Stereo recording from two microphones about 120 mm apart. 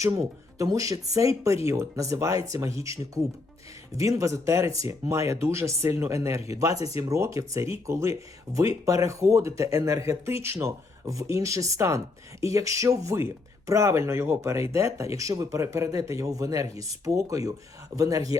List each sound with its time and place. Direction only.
0.6 s speech: 30° right (ahead or behind)